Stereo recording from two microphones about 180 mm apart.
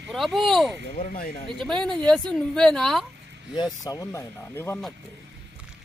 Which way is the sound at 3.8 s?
20° left (ahead or behind).